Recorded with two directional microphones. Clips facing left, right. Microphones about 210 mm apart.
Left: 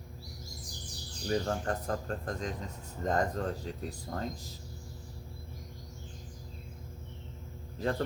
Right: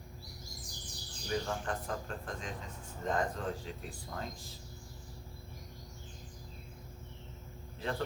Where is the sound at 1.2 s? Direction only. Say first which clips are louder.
Left 5 dB; 40° left (ahead or behind).